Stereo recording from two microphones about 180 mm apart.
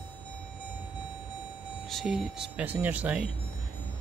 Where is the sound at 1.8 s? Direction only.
Centre (ahead or behind).